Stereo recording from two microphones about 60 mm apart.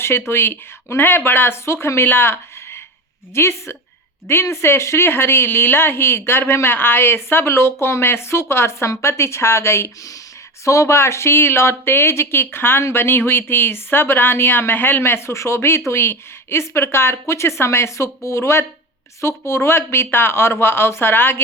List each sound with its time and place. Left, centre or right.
0.0 s speech: left